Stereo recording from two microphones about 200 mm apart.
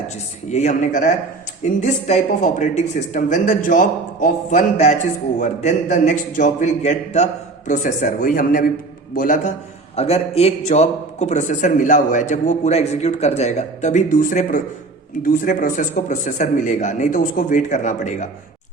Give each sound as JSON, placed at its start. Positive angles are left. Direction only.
{"t": 0.4, "sound": "a man's voice", "side_deg": 35}
{"t": 9.9, "sound": "a man's voice", "side_deg": 30}